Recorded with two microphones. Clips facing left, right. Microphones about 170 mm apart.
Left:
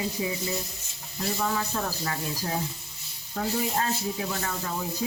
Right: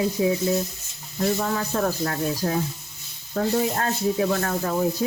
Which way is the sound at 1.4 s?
50° right (ahead or behind).